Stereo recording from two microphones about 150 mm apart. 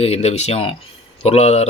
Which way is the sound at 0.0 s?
45° left (ahead or behind).